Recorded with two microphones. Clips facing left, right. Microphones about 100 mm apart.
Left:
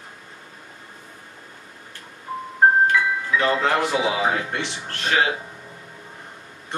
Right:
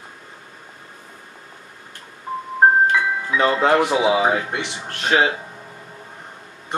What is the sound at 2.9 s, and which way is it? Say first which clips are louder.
Speech: right 1 dB; 20° right (ahead or behind).